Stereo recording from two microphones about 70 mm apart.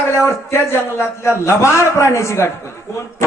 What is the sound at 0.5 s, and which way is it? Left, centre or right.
A man's voice, left.